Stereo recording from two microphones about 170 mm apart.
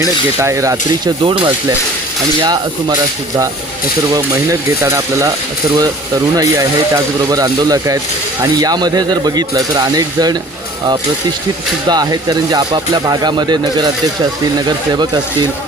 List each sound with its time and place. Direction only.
0.4 s speech: 20° right (ahead or behind)
1.2 s speech: 30° right (ahead or behind)
6.3 s speech: 20° right (ahead or behind)
11.9 s speech: 25° right (ahead or behind)
14.9 s speech: 25° right (ahead or behind)